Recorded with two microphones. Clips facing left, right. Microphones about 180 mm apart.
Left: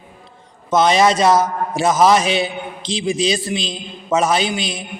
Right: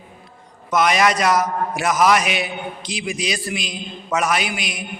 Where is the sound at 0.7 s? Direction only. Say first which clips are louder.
Left 4 dB; 25° left (ahead or behind).